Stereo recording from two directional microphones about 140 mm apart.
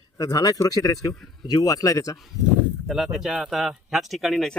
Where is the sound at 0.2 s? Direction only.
25° left (ahead or behind).